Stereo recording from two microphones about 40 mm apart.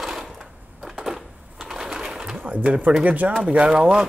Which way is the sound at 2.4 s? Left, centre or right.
Right.